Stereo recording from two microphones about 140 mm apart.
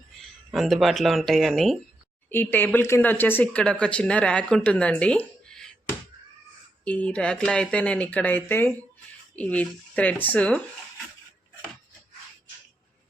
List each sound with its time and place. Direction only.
0.2 s speech: centre (ahead or behind)
2.3 s speech: 15° left (ahead or behind)
6.8 s speech: 10° left (ahead or behind)